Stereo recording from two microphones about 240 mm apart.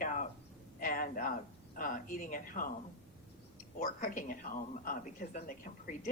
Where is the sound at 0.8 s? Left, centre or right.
Left.